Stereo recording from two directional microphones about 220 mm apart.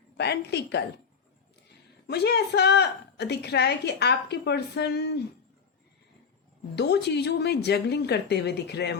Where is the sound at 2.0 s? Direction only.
45° left (ahead or behind).